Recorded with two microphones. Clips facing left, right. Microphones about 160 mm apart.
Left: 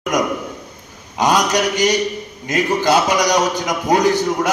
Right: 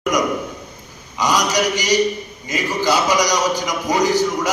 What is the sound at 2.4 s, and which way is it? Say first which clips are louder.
A man's voice: left 3 dB; 55° left (ahead or behind).